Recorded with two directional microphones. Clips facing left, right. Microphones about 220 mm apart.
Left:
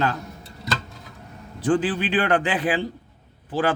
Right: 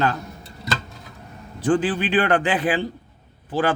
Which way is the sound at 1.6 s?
55° right (ahead or behind).